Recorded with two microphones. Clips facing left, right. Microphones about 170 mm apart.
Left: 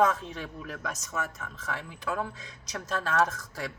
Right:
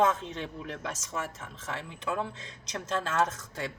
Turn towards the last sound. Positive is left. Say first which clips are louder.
# left 1 dB
turn(degrees=-25)  # may be behind; listen again after turning